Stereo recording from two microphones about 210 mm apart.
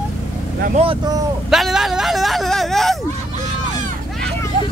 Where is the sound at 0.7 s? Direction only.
20° right (ahead or behind).